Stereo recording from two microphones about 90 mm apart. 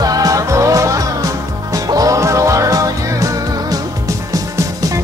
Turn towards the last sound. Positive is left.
turn(degrees=-35)  # may be behind; listen again after turning